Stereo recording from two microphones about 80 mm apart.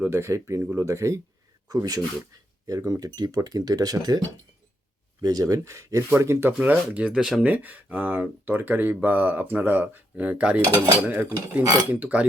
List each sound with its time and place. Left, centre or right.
0.1 s speech: right
1.7 s speech: right
2.6 s speech: right
5.2 s speech: right
6.6 s speech: centre
7.1 s speech: centre
7.4 s speech: right